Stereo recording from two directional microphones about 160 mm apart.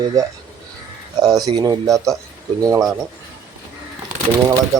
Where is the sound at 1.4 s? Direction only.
25° right (ahead or behind).